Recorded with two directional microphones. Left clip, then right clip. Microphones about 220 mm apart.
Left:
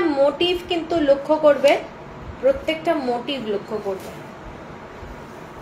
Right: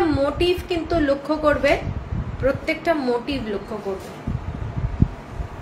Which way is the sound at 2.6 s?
20° right (ahead or behind).